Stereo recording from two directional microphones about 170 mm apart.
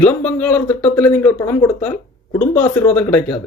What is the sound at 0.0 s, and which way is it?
A man's voice, 10° left (ahead or behind).